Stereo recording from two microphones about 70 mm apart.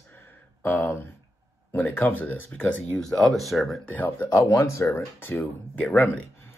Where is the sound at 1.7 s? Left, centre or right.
Left.